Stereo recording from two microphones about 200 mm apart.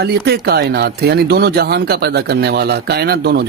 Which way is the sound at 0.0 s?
55° right (ahead or behind).